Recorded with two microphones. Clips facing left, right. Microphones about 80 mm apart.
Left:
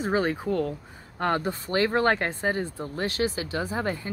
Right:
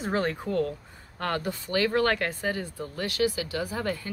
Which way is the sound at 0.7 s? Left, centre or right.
Left.